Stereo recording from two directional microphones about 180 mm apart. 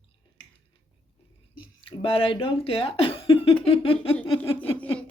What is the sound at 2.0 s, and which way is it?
Speech, 30° left (ahead or behind).